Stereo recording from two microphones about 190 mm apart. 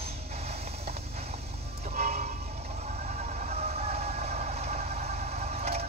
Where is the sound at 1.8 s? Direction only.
40° right (ahead or behind).